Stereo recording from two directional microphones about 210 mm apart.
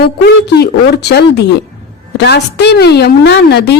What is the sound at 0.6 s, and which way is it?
A woman's voice, 50° left (ahead or behind).